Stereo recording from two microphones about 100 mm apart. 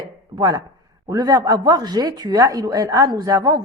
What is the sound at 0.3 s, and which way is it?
Speech, 40° right (ahead or behind).